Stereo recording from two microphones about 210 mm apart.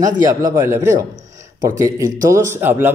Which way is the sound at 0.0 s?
15° right (ahead or behind).